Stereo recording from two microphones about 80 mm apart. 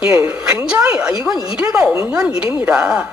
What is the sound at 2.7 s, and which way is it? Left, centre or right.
Speech, centre.